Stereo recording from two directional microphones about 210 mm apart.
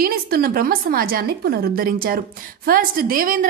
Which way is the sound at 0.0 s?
45° right (ahead or behind).